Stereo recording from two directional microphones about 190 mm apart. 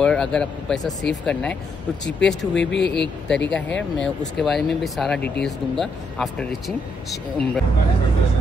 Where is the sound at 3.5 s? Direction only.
5° left (ahead or behind).